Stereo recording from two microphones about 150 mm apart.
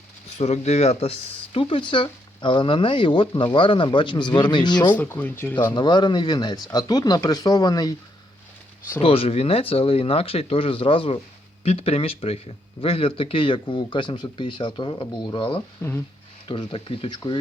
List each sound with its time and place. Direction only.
0.3 s speech: 45° left (ahead or behind); by 4.9 s 30° left (ahead or behind)
4.9 s speech: 10° left (ahead or behind)
5.7 s speech: 30° left (ahead or behind)
9.0 s speech: 40° left (ahead or behind)